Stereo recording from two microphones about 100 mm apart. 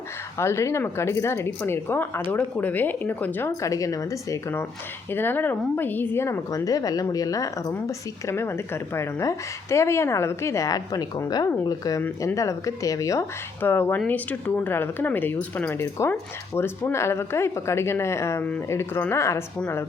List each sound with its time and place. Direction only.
0.3 s speech: 25° left (ahead or behind)
3.6 s a woman's voice: 35° left (ahead or behind)
5.1 s speech: 20° left (ahead or behind)
6.5 s a woman's voice: 35° left (ahead or behind)
13.6 s speech: 20° left (ahead or behind)